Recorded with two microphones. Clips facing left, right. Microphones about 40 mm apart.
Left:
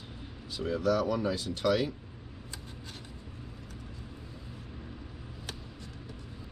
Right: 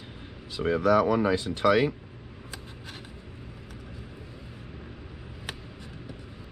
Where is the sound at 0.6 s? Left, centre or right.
Right.